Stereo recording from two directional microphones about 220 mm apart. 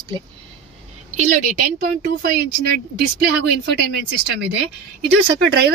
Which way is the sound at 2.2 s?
45° right (ahead or behind).